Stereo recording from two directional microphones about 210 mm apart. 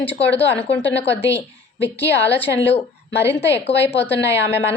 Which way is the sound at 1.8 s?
55° left (ahead or behind).